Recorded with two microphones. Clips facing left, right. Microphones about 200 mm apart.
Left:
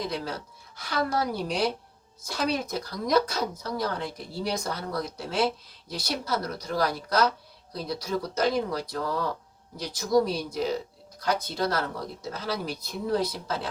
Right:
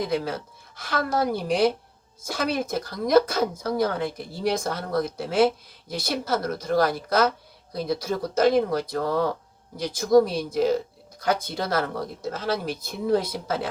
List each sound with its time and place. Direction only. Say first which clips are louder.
0.1 s speech: right 6 dB; 50° right (ahead or behind)